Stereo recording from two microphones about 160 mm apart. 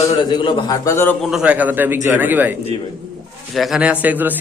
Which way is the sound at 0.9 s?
15° left (ahead or behind).